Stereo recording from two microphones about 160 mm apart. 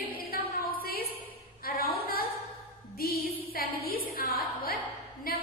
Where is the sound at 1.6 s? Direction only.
70° left (ahead or behind).